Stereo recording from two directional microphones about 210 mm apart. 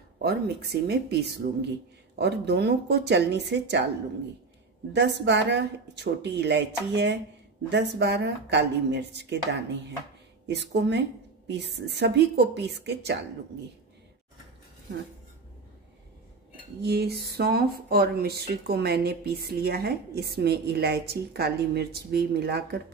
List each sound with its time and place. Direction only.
0.2 s a woman's voice: 50° right (ahead or behind)
4.9 s a woman's voice: 55° right (ahead or behind)
16.8 s speech: 50° right (ahead or behind)